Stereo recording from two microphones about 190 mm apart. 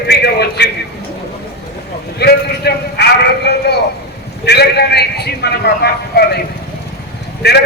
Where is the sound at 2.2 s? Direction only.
60° left (ahead or behind).